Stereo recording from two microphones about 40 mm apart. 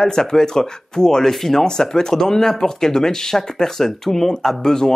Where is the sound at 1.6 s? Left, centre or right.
Centre.